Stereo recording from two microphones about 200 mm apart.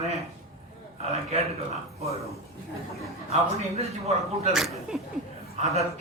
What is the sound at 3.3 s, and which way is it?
A man's voice, 30° right (ahead or behind).